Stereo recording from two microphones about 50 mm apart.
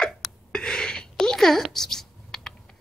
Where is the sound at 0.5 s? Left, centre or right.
Centre.